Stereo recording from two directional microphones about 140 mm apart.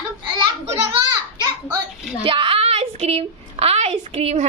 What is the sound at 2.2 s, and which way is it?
A woman's voice, 40° right (ahead or behind).